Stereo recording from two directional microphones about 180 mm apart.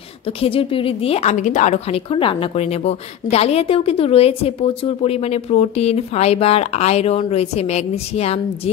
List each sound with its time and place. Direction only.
0.4 s a woman's voice: 30° left (ahead or behind)